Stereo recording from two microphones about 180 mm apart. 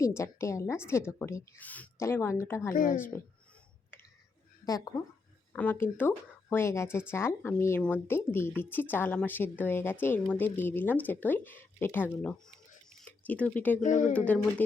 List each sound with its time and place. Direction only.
0.0 s speech: 15° left (ahead or behind)
2.7 s speech: 50° left (ahead or behind)
3.9 s a sound: 10° left (ahead or behind)
4.6 s speech: 20° left (ahead or behind)
12.9 s a sound: 5° left (ahead or behind)
13.8 s speech: 45° left (ahead or behind)
14.1 s speech: 5° left (ahead or behind)